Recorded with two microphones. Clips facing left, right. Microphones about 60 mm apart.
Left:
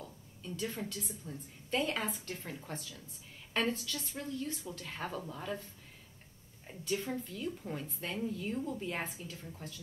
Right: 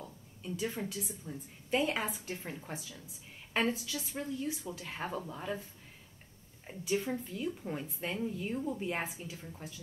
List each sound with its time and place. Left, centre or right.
0.5 s a woman's voice: centre
6.7 s a woman's voice: centre